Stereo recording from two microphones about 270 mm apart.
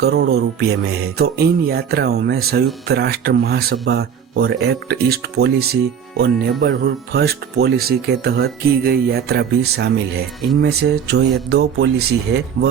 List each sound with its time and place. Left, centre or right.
0.0 s speech: right